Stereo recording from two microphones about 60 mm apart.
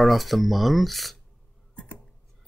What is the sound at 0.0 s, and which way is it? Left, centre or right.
Speech, centre.